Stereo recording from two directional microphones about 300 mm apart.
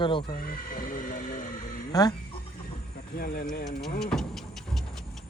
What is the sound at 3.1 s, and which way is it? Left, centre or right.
Speech, left.